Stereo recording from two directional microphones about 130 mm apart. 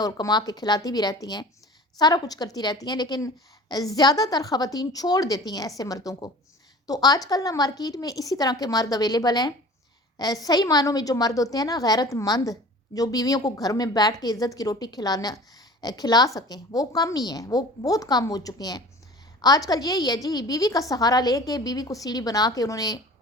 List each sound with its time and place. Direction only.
0.0 s a woman's voice: 30° left (ahead or behind)